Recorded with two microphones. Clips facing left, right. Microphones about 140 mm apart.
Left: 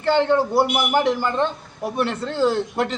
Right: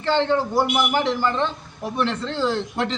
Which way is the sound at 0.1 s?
10° left (ahead or behind).